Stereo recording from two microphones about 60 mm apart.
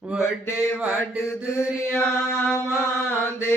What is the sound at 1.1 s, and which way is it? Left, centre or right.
Mantra, left.